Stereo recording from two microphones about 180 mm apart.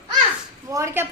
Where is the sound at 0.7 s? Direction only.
15° right (ahead or behind).